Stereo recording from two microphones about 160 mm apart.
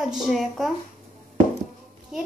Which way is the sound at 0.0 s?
Centre (ahead or behind).